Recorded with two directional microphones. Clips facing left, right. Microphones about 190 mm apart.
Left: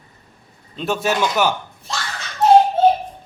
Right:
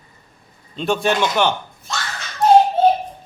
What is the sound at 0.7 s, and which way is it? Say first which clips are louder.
Speech: right 2 dB; 5° left (ahead or behind).